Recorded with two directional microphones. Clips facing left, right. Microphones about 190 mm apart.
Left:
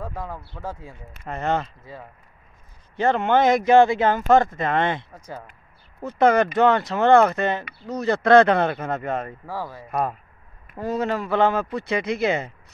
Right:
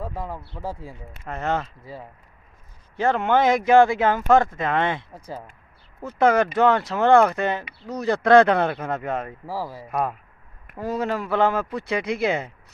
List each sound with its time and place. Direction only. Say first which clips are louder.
0.0 s speech: right 1 dB; centre (ahead or behind)
5.1 s speech: right 1 dB; 30° right (ahead or behind)
6.0 s speech: left 1 dB; 5° right (ahead or behind)